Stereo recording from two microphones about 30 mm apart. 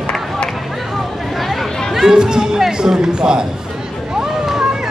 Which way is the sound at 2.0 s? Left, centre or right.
Right.